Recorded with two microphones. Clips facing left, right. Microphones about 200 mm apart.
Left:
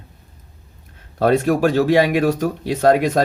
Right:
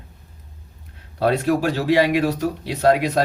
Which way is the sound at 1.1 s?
50° left (ahead or behind).